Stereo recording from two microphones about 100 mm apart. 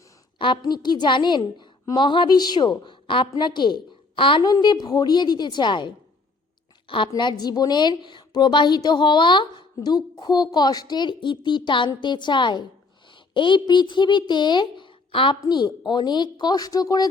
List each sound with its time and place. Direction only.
0.3 s a sound: 55° left (ahead or behind)
0.6 s a woman's voice: 45° left (ahead or behind)
4.4 s a woman's voice: 45° left (ahead or behind)
7.2 s a woman's voice: 45° left (ahead or behind)
15.4 s a woman's voice: 45° left (ahead or behind)